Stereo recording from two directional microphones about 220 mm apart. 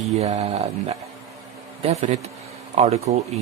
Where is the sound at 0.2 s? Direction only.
30° right (ahead or behind).